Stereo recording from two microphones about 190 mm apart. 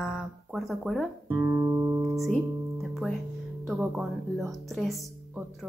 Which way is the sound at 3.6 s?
Centre (ahead or behind).